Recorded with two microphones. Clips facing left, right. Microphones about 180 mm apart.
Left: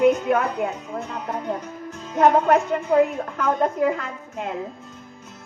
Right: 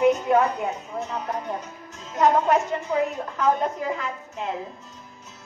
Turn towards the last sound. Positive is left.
turn(degrees=55)  # may be behind; listen again after turning